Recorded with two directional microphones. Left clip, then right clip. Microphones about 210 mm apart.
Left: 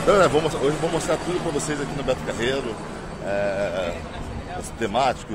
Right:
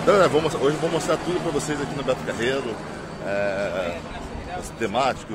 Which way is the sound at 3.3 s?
10° left (ahead or behind).